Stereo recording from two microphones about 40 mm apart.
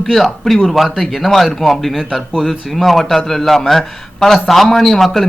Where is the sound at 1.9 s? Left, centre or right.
Centre.